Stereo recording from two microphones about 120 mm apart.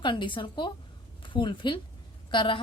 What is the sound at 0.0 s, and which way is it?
A woman's voice, 45° left (ahead or behind).